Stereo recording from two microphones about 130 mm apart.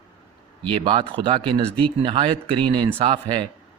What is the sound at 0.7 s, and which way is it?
Speech, 40° right (ahead or behind).